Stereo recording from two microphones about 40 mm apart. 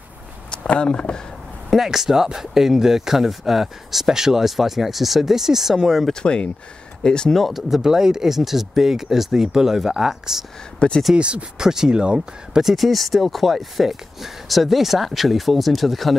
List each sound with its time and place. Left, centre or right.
0.7 s speech: left
1.9 s speech: centre
6.1 s speech: left
7.3 s speech: centre
7.8 s speech: centre
10.8 s speech: left
11.1 s speech: right
11.6 s speech: centre
12.6 s speech: centre